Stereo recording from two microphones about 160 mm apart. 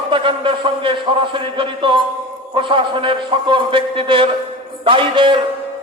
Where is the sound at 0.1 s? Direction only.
30° right (ahead or behind).